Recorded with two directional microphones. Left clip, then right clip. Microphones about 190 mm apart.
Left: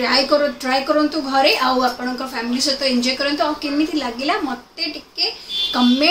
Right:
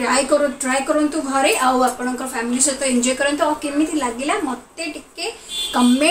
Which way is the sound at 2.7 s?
15° left (ahead or behind).